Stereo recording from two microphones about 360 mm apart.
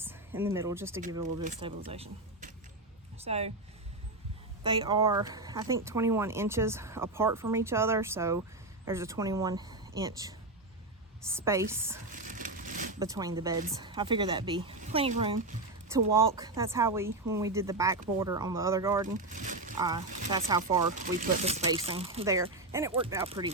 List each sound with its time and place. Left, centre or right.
0.0 s speech: centre
1.5 s speech: centre
4.6 s speech: centre
12.1 s a sound: right
13.0 s speech: centre
19.1 s speech: right
19.7 s speech: centre